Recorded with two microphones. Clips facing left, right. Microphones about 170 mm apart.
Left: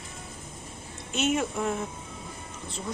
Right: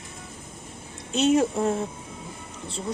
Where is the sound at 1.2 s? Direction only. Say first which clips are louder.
Right 6 dB; 35° right (ahead or behind).